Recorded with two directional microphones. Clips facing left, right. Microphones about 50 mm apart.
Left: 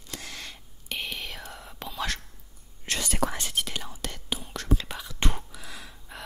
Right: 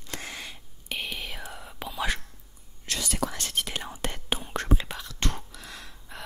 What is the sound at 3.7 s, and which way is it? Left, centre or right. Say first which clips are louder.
Whispering: right 2 dB; right.